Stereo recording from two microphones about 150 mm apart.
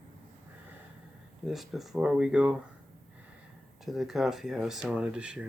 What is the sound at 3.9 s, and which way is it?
Speech, centre (ahead or behind).